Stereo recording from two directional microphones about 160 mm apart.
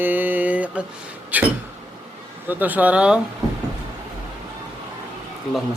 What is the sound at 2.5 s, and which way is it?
Mantra, 10° right (ahead or behind).